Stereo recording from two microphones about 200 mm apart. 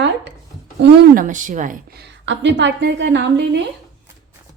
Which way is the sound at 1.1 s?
40° right (ahead or behind).